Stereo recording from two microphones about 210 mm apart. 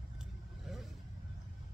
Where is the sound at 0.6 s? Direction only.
Centre (ahead or behind).